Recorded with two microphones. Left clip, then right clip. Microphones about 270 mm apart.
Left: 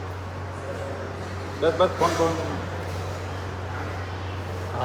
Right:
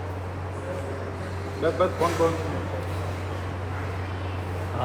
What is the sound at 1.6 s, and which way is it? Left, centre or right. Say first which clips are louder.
Speech: left 3 dB; left.